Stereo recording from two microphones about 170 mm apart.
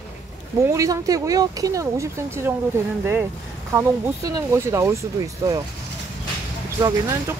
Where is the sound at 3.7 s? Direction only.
15° right (ahead or behind).